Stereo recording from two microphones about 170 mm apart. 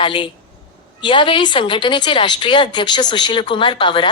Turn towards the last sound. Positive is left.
turn(degrees=30)  # may be behind; listen again after turning